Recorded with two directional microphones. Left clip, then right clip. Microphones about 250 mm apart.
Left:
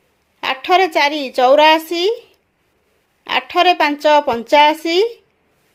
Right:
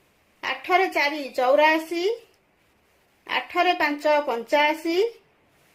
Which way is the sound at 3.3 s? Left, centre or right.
Left.